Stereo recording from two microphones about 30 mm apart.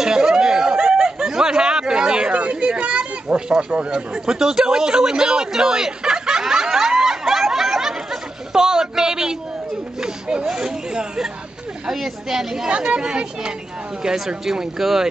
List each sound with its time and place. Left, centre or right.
0.0 s a sound: right
2.3 s children playing: right
3.3 s speech: right
4.4 s speech: centre
4.7 s a sound: right
7.4 s chatter: centre
9.9 s a sound: right
12.3 s speech: centre
13.0 s speech: right
14.0 s speech: centre